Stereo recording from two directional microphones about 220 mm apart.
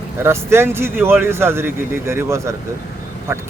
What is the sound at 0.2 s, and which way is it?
Speech, 10° right (ahead or behind).